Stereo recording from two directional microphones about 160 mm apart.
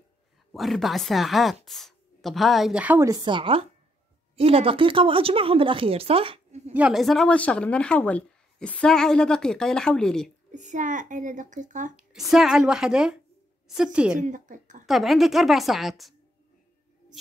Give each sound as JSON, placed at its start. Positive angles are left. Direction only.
{"t": 0.5, "sound": "speech", "side_deg": 0}
{"t": 3.1, "sound": "a woman's voice", "side_deg": -25}
{"t": 6.7, "sound": "speech", "side_deg": -5}
{"t": 10.5, "sound": "a child's voice", "side_deg": -50}
{"t": 12.0, "sound": "a woman's voice", "side_deg": 0}
{"t": 14.2, "sound": "a child's voice", "side_deg": -50}
{"t": 14.9, "sound": "speech", "side_deg": 0}